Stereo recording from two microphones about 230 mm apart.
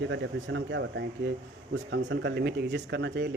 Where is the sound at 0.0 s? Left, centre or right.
Right.